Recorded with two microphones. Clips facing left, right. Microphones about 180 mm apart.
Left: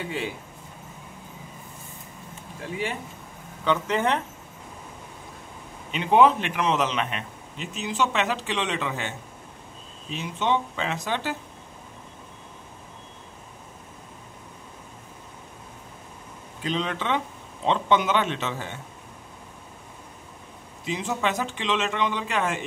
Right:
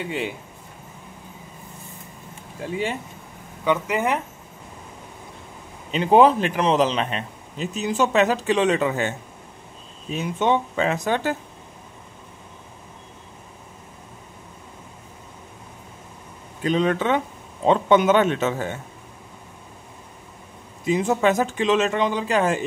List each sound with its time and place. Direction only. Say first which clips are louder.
3.6 s speech: right 2 dB; 10° right (ahead or behind)
5.9 s a man's voice: right 3 dB; 35° right (ahead or behind)
10.1 s a man's voice: right 4 dB; 50° right (ahead or behind)
16.6 s a man's voice: right 7 dB; 50° right (ahead or behind)
20.8 s a man's voice: right 8 dB; 50° right (ahead or behind)